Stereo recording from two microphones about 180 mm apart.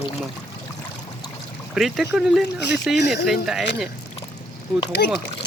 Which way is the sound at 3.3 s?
Centre (ahead or behind).